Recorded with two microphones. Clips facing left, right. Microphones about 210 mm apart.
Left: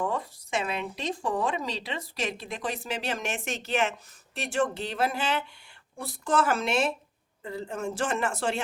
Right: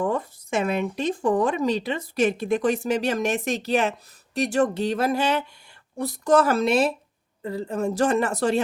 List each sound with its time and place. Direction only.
0.0 s a woman's voice: 50° right (ahead or behind)